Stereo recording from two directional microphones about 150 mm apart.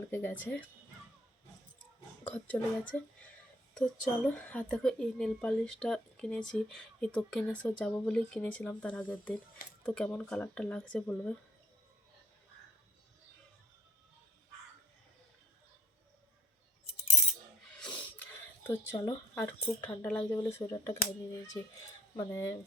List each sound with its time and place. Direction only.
0.1 s speech: 15° left (ahead or behind)
2.2 s speech: 10° left (ahead or behind)
17.7 s a sound: 5° left (ahead or behind)
18.6 s speech: 25° left (ahead or behind)
19.4 s speech: 10° left (ahead or behind)
22.1 s speech: 20° left (ahead or behind)